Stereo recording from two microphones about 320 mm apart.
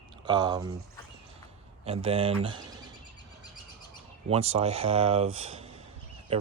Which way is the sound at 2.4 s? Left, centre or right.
Centre.